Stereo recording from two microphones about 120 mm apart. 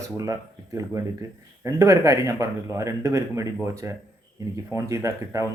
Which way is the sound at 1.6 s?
25° right (ahead or behind).